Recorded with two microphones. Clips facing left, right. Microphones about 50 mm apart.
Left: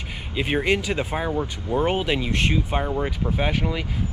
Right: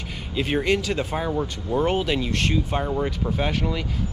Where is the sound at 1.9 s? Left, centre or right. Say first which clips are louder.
Even; centre.